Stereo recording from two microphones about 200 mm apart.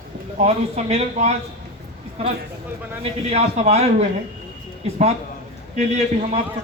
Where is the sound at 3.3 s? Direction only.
30° right (ahead or behind).